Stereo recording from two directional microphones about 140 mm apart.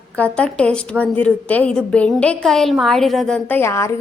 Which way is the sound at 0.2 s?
10° left (ahead or behind).